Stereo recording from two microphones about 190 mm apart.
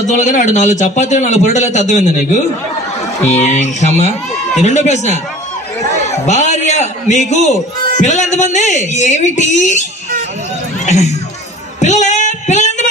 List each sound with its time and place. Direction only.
0.0 s a man's voice: 40° left (ahead or behind)
10.9 s a man's voice: 35° left (ahead or behind)
11.8 s female singing: 40° left (ahead or behind)